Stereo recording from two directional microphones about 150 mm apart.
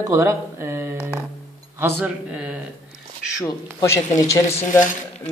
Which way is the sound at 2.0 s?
10° right (ahead or behind).